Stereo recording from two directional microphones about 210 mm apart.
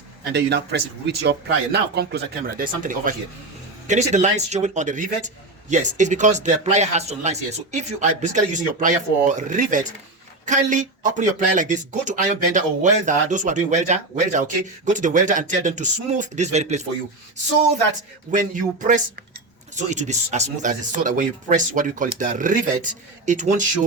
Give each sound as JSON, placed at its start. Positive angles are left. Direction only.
{"t": 0.3, "sound": "speech", "side_deg": -50}
{"t": 18.3, "sound": "speech", "side_deg": -40}